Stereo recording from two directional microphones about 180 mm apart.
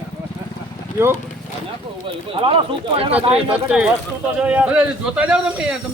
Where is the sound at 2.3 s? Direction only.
30° right (ahead or behind).